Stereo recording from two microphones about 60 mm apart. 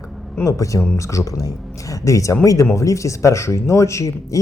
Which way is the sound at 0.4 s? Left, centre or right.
Left.